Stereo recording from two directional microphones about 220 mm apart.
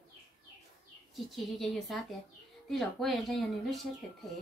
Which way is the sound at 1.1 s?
Centre (ahead or behind).